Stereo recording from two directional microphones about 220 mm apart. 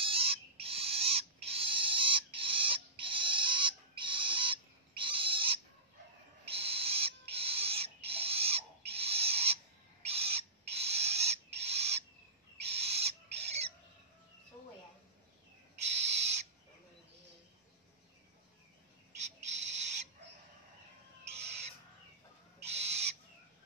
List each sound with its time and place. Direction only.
0.0 s owl: 25° right (ahead or behind)
15.8 s owl: 30° right (ahead or behind)
19.2 s bird: 30° right (ahead or behind)
22.7 s owl: 30° right (ahead or behind)